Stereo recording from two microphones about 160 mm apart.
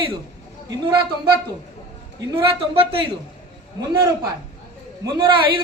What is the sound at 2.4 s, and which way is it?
Speech, 35° right (ahead or behind).